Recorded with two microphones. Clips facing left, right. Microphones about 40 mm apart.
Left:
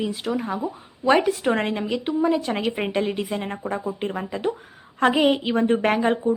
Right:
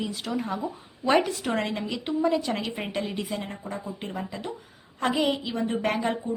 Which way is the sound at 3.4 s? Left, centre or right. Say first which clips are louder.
Left 7 dB; left.